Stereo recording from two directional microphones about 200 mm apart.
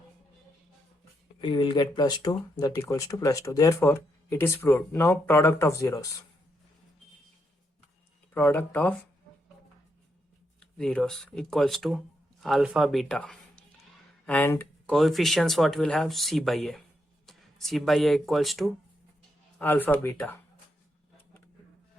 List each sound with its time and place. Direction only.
1.4 s speech: 25° left (ahead or behind)
8.3 s speech: 10° left (ahead or behind)
10.6 s speech: 5° left (ahead or behind)